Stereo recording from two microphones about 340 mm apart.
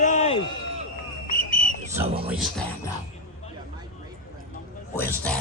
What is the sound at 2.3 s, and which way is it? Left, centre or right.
Music, centre.